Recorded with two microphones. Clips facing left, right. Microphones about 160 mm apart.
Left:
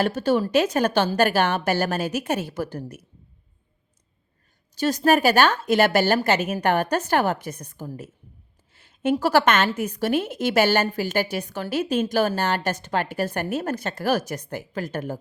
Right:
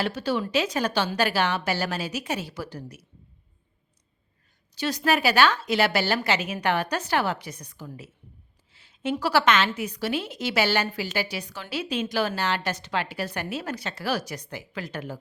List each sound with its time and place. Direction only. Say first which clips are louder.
0.0 s a woman's voice: left 5 dB; 50° left (ahead or behind)
4.7 s a woman's voice: left 5 dB; 45° left (ahead or behind)